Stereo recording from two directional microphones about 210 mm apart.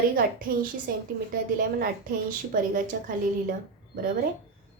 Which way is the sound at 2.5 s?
40° right (ahead or behind).